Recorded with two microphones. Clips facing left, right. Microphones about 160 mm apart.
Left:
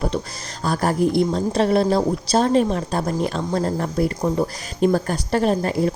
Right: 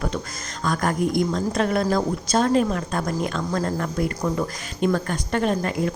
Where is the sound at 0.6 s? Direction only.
35° left (ahead or behind).